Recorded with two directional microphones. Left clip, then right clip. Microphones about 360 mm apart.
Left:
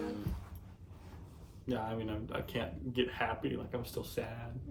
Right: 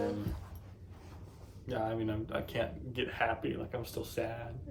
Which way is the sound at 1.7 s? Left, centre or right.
Centre.